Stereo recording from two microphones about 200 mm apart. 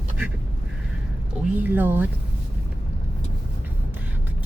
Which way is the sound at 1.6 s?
10° right (ahead or behind).